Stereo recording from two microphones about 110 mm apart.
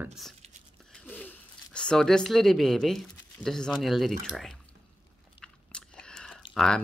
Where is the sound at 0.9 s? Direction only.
15° left (ahead or behind).